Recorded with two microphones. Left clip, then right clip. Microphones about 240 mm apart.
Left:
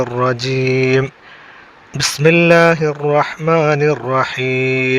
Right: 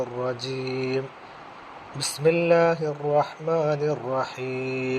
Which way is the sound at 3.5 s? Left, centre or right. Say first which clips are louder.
Left 11 dB; left.